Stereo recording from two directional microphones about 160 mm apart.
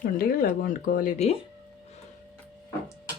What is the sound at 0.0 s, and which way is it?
Speech, 65° left (ahead or behind).